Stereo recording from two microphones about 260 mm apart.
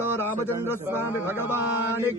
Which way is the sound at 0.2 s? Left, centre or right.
Centre.